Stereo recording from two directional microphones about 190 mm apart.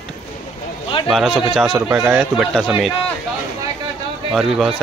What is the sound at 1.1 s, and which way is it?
A man's voice, centre (ahead or behind).